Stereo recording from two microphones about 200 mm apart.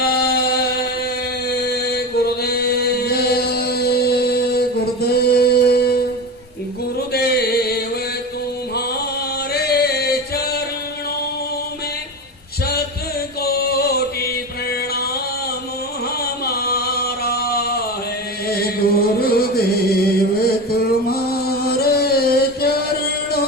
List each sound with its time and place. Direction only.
0.0 s music: 50° left (ahead or behind)
1.5 s chant: 50° left (ahead or behind)
7.1 s music: 50° left (ahead or behind)
9.5 s music: 50° left (ahead or behind)
13.4 s chant: 50° left (ahead or behind)
16.2 s a sound: 50° left (ahead or behind)
18.4 s chant: 50° left (ahead or behind)
20.7 s music: 50° left (ahead or behind)